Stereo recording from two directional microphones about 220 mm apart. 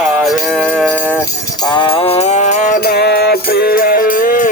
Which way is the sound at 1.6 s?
20° left (ahead or behind).